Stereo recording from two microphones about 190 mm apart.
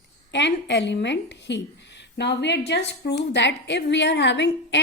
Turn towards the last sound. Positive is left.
turn(degrees=65)  # may be behind; listen again after turning